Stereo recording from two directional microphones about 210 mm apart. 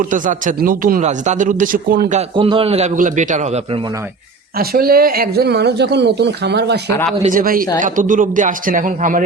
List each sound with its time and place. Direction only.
0.0 s a man's voice: 40° right (ahead or behind)
2.3 s a man's voice: 25° right (ahead or behind)
4.5 s speech: 45° right (ahead or behind)
7.2 s a man's voice: 40° right (ahead or behind)